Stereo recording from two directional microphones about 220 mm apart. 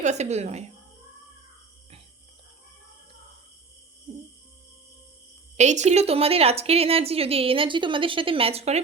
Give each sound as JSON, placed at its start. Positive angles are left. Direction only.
{"t": 0.0, "sound": "speech", "side_deg": -30}
{"t": 5.5, "sound": "a woman's voice", "side_deg": -30}